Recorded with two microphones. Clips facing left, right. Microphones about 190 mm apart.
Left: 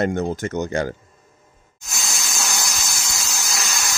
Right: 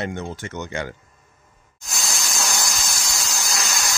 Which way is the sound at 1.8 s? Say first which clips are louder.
Right 1 dB; centre (ahead or behind).